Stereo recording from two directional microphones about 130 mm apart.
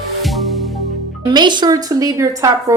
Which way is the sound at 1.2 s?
35° right (ahead or behind).